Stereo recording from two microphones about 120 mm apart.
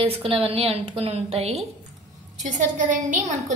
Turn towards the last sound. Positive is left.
turn(degrees=-90)